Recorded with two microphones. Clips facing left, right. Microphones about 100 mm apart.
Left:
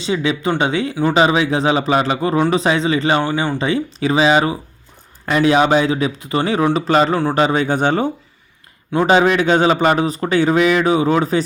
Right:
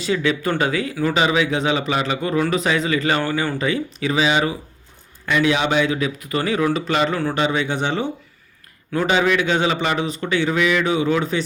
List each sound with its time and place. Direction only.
0.0 s speech: 20° left (ahead or behind); by 11.4 s 35° left (ahead or behind)